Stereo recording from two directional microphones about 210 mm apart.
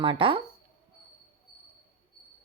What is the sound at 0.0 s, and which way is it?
Speech, 25° right (ahead or behind).